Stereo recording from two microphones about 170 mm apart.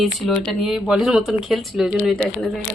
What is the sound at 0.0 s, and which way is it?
Speech, centre (ahead or behind).